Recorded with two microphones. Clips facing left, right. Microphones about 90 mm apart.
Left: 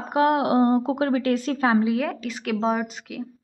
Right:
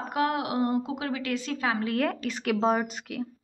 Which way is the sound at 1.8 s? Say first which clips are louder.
Left 3 dB; 5° left (ahead or behind).